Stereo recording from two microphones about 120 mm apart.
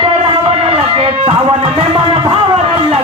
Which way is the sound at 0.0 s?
50° right (ahead or behind).